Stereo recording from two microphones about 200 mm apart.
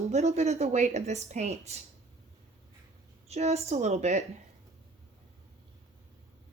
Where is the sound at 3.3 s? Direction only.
30° right (ahead or behind).